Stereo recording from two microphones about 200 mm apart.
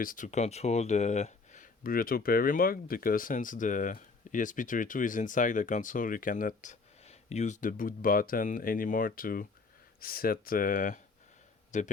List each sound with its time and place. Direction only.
0.0 s speech: 40° left (ahead or behind)